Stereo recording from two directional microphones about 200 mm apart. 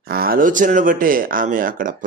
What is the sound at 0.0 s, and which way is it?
Speech, 50° right (ahead or behind).